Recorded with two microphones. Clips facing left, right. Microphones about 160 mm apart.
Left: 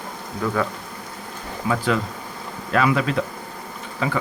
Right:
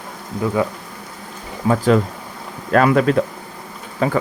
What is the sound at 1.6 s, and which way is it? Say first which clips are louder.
Speech: right 7 dB; 40° right (ahead or behind).